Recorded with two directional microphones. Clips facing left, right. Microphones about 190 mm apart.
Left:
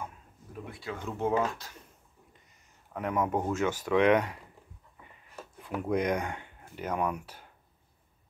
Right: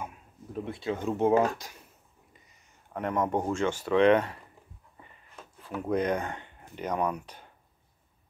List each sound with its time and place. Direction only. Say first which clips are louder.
0.7 s speech: right 7 dB; 25° right (ahead or behind)
2.9 s speech: right 1 dB; centre (ahead or behind)
5.3 s a sound: left 1 dB; 15° left (ahead or behind)
6.7 s speech: right 2 dB; 5° left (ahead or behind)